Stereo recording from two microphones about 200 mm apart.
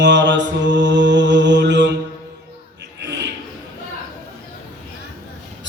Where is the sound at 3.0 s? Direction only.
60° right (ahead or behind).